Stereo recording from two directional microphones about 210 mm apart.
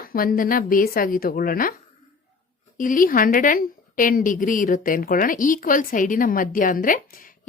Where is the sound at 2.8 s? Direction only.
40° left (ahead or behind).